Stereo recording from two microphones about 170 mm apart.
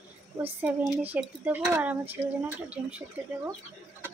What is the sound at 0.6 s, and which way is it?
Speech, 10° right (ahead or behind).